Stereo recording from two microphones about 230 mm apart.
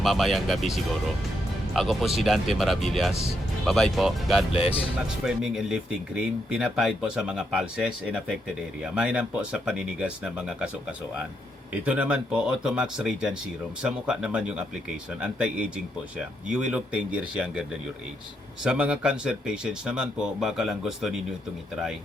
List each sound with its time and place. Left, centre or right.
0.0 s speech: centre
4.5 s speech: left
5.2 s speech: centre
11.9 s speech: centre